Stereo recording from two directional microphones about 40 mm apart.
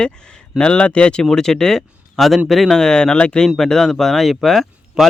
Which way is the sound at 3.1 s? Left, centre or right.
Left.